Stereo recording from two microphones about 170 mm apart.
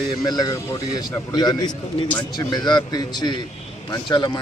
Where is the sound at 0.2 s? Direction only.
20° left (ahead or behind).